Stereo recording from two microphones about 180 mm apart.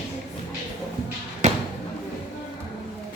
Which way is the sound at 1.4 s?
40° right (ahead or behind).